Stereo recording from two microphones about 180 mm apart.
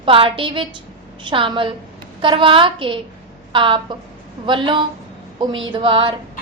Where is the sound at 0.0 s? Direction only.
30° right (ahead or behind).